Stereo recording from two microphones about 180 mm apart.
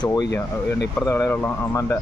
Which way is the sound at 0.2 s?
70° left (ahead or behind).